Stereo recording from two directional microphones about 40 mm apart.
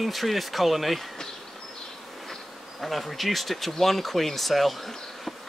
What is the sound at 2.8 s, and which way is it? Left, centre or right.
Speech, centre.